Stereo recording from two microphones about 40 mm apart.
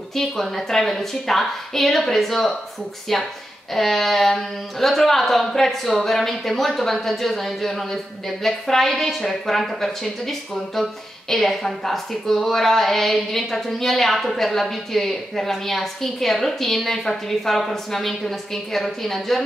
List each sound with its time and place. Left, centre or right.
0.1 s a woman's voice: centre